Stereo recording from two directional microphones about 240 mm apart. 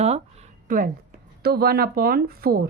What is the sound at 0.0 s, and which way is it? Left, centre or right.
Speech, right.